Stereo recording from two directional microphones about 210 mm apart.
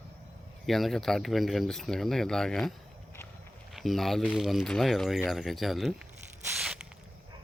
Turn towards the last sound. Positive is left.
turn(degrees=-5)  # may be behind; listen again after turning